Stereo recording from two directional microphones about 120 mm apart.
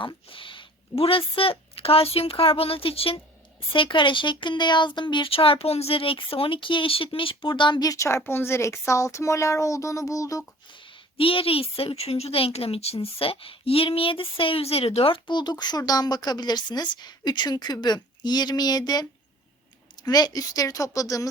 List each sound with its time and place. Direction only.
0.0 s a woman's voice: 45° left (ahead or behind); by 10.4 s 30° left (ahead or behind)
10.7 s a woman's voice: 45° left (ahead or behind)